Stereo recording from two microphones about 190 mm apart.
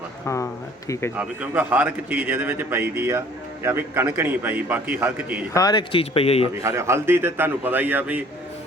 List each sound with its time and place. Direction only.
0.3 s a sound: 15° left (ahead or behind)
1.1 s a man's voice: 10° right (ahead or behind)
5.5 s speech: 20° left (ahead or behind)
6.6 s a man's voice: 15° right (ahead or behind)